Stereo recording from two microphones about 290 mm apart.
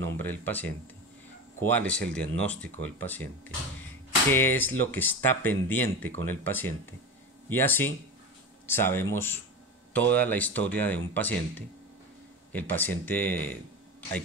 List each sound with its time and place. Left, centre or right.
0.0 s speech: centre
4.3 s speech: centre